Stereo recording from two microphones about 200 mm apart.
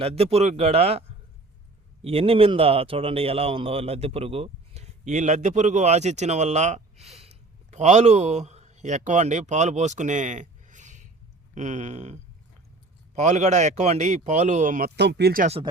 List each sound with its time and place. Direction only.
0.0 s a man's voice: 30° right (ahead or behind); by 15.4 s 50° right (ahead or behind)